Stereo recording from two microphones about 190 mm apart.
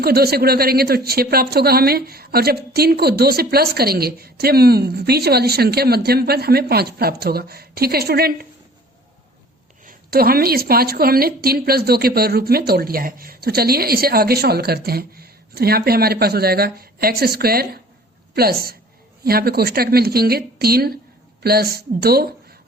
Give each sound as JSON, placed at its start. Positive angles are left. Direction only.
{"t": 0.0, "sound": "speech", "side_deg": -55}
{"t": 9.8, "sound": "a woman's voice", "side_deg": -50}